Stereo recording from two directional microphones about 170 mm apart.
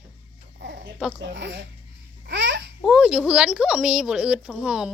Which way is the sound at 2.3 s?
90° right.